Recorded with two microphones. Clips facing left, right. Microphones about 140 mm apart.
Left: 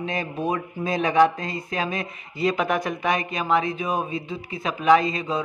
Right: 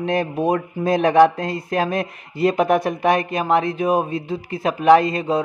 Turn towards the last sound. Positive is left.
turn(degrees=-55)  # may be behind; listen again after turning